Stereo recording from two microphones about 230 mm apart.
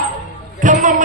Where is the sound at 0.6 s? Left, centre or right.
Right.